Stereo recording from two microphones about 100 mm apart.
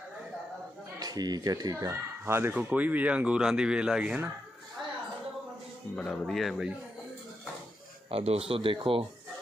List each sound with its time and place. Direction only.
0.9 s speech: 40° right (ahead or behind); by 4.2 s 10° right (ahead or behind)
6.0 s speech: 5° left (ahead or behind)
8.1 s speech: 85° right; by 9.0 s 65° right (ahead or behind)